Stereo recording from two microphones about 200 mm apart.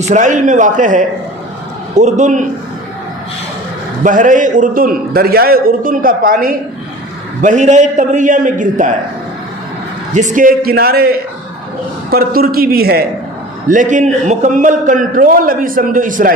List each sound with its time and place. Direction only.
0.1 s a man's voice: 40° right (ahead or behind)
4.0 s a man's voice: 40° right (ahead or behind)
10.2 s a man's voice: 40° right (ahead or behind)